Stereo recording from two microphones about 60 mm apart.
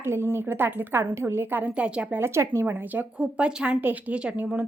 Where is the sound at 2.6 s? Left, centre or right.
Right.